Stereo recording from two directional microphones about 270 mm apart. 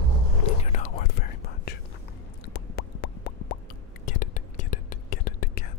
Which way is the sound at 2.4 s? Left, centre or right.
Left.